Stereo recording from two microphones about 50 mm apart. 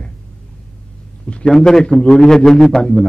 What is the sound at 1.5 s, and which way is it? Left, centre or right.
A man's voice, centre.